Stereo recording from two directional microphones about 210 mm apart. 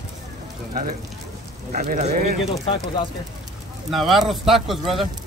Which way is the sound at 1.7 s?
40° right (ahead or behind).